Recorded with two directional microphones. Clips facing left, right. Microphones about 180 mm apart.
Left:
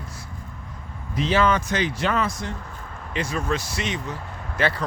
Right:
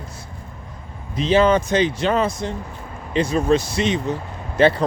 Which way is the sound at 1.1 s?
20° right (ahead or behind).